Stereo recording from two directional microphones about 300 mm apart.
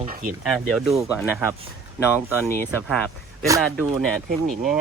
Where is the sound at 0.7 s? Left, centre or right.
Centre.